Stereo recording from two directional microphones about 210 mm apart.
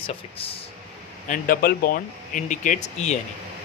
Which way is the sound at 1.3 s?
45° left (ahead or behind).